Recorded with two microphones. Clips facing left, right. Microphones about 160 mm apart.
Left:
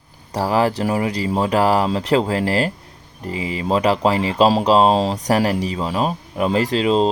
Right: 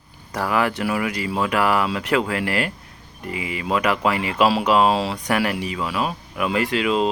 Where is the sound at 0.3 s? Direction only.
30° left (ahead or behind).